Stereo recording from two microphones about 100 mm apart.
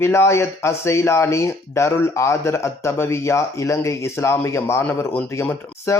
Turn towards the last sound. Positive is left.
turn(degrees=25)  # may be behind; listen again after turning